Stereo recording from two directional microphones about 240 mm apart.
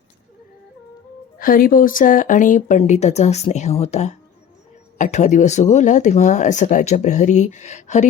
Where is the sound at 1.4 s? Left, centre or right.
Left.